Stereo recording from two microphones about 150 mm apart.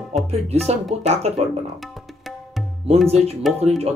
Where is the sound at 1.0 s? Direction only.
45° right (ahead or behind).